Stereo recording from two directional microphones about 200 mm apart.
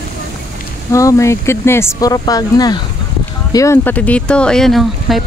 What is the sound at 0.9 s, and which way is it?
Speech, 15° left (ahead or behind).